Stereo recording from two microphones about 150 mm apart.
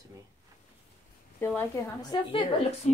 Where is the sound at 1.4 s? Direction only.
15° left (ahead or behind).